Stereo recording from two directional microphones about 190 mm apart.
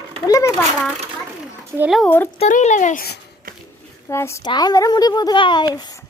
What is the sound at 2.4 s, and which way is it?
Speech, 40° left (ahead or behind).